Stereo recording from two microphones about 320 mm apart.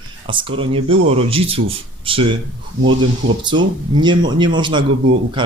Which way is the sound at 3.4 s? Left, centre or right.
Centre.